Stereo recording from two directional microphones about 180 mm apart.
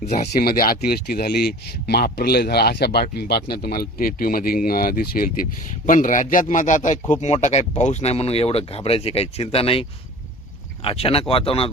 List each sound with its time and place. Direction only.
0.0 s speech: 40° left (ahead or behind)
0.3 s speech: 55° left (ahead or behind); by 9.8 s 30° left (ahead or behind)
10.8 s speech: 30° left (ahead or behind)